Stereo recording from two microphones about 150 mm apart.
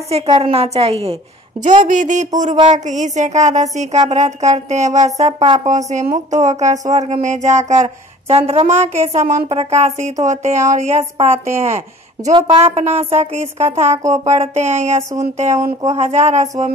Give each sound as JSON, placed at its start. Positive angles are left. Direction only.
{"t": 0.1, "sound": "a woman's voice", "side_deg": -40}
{"t": 1.9, "sound": "a sound", "side_deg": -55}
{"t": 2.5, "sound": "speech", "side_deg": -45}
{"t": 12.3, "sound": "speech", "side_deg": -25}
{"t": 12.5, "sound": "speech", "side_deg": -45}